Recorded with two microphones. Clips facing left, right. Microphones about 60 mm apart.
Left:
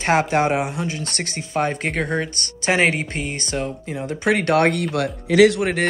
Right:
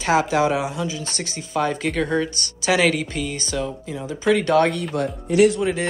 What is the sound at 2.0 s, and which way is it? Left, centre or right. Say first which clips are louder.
Speech: right 2 dB; left.